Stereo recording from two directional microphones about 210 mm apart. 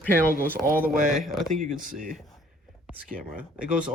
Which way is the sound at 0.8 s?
40° right (ahead or behind).